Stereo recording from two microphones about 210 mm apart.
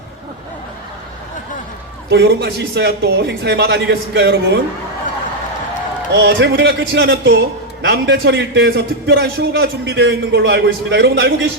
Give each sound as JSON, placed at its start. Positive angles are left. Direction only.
{"t": 2.0, "sound": "a man's voice", "side_deg": -55}
{"t": 6.1, "sound": "a man's voice", "side_deg": -55}